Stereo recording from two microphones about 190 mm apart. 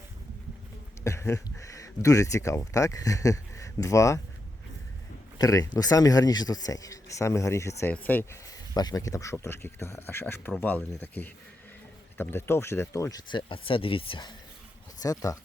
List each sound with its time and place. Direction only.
1.0 s speech: 15° left (ahead or behind)
5.4 s speech: 20° left (ahead or behind)
8.7 s speech: 20° left (ahead or behind)